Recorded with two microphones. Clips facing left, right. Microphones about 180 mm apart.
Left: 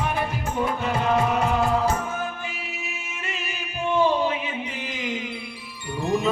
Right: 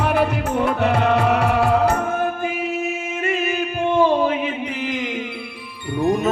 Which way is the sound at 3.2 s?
50° right (ahead or behind).